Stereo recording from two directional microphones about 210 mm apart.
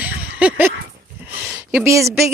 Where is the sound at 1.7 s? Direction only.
15° right (ahead or behind).